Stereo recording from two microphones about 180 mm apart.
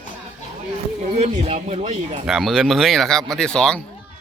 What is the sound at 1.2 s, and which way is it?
Speech, 40° right (ahead or behind).